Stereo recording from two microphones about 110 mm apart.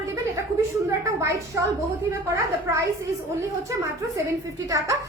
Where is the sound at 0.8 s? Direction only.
30° right (ahead or behind).